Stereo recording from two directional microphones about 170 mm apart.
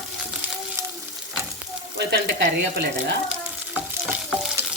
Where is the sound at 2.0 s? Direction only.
80° right.